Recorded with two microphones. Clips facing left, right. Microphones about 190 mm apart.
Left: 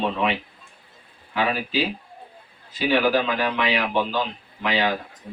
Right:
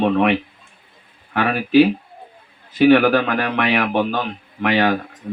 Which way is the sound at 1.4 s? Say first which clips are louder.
Right 10 dB; 60° right (ahead or behind).